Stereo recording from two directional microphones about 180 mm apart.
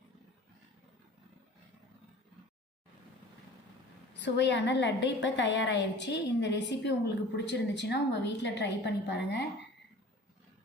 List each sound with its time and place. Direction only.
4.2 s a woman's voice: 75° left (ahead or behind)